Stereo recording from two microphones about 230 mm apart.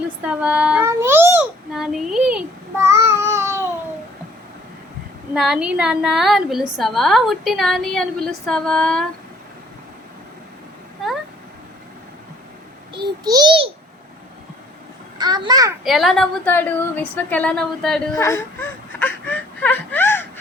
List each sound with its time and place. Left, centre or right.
0.2 s babbling: centre
5.3 s a woman's voice: centre
12.9 s a sound: centre
15.2 s a child's voice: centre
15.8 s a woman's voice: centre
18.9 s whimper: centre